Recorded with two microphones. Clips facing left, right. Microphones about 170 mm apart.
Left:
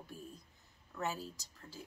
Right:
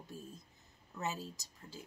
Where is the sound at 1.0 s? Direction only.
20° right (ahead or behind).